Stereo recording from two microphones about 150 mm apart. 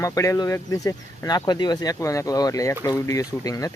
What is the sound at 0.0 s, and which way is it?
Speech, 20° left (ahead or behind).